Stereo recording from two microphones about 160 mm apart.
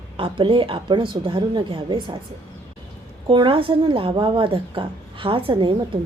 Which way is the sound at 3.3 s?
30° right (ahead or behind).